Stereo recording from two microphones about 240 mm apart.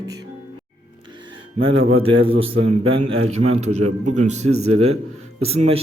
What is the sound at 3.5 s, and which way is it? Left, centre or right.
Speech, right.